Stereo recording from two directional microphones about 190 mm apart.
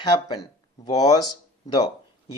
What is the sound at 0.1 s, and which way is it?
Speech, 20° left (ahead or behind).